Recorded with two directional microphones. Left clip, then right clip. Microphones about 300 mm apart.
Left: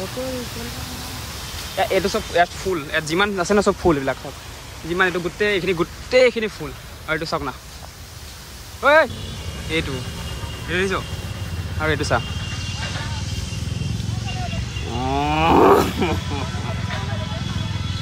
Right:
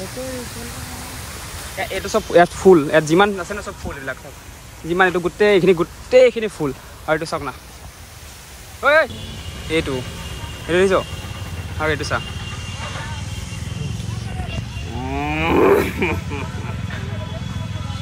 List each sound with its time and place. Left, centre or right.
1.8 s speech: left
2.3 s speech: centre
3.4 s speech: centre
4.8 s speech: centre
8.8 s speech: centre
11.8 s speech: centre
15.0 s cattle: centre